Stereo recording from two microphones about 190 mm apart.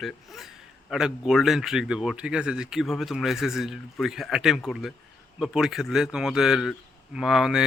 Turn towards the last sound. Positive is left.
turn(degrees=0)  # may be behind; listen again after turning